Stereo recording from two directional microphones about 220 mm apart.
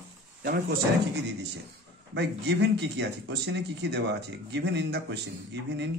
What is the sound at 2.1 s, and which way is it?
Speech, 50° right (ahead or behind).